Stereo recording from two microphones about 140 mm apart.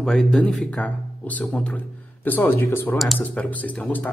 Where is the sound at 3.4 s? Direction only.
10° left (ahead or behind).